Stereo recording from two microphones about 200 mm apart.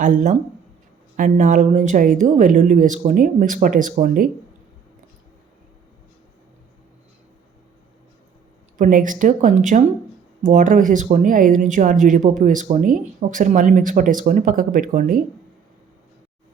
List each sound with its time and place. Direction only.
0.0 s speech: 40° right (ahead or behind)
8.8 s speech: 40° right (ahead or behind)